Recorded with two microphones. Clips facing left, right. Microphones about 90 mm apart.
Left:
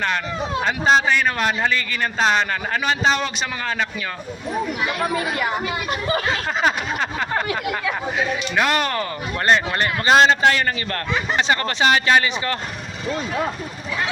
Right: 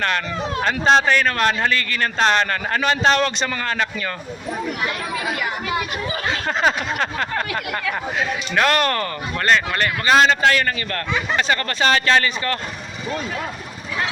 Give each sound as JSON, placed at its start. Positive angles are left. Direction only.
{"t": 0.6, "sound": "speech", "side_deg": 5}
{"t": 6.6, "sound": "a sound", "side_deg": 5}
{"t": 8.2, "sound": "speech", "side_deg": 5}
{"t": 9.4, "sound": "speech", "side_deg": 25}